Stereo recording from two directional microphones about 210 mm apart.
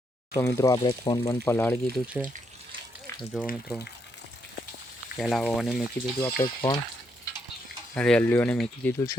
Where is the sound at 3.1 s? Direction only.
10° left (ahead or behind).